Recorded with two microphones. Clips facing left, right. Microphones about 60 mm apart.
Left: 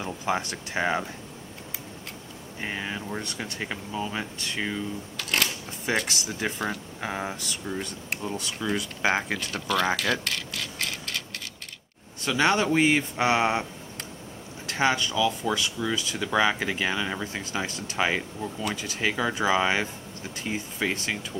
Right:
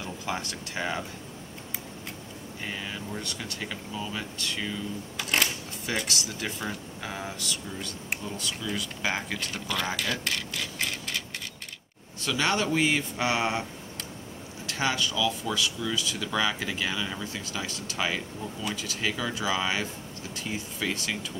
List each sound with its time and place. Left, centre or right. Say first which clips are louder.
0.0 s speech: left 5 dB; left
2.6 s speech: left 4 dB; left
5.1 s camera: right 1 dB; centre
6.0 s speech: left 3 dB; left
9.5 s speech: left 7 dB; centre
10.2 s clock: even; centre
12.3 s speech: left 4 dB; left
14.7 s speech: left 4 dB; left
15.5 s speech: left 2 dB; left